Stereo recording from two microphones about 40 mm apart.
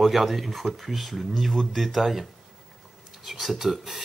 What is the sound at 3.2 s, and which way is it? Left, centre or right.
Speech, centre.